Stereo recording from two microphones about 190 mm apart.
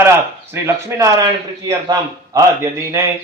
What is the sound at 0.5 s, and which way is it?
Speech, 15° right (ahead or behind).